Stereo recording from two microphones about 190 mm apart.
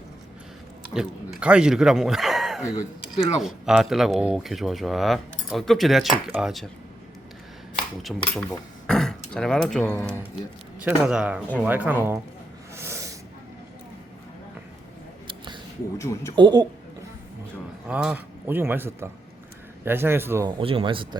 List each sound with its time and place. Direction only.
0.9 s speech: 5° right (ahead or behind)
8.0 s speech: 5° left (ahead or behind); by 12.2 s 10° right (ahead or behind)
12.7 s snake: 15° right (ahead or behind)
16.0 s speech: 15° left (ahead or behind)
16.3 s speech: 25° right (ahead or behind)
17.8 s speech: 5° right (ahead or behind)
20.6 s speech: 30° right (ahead or behind)